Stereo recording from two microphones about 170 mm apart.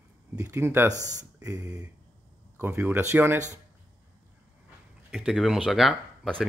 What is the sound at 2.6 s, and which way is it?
Speech, 10° right (ahead or behind).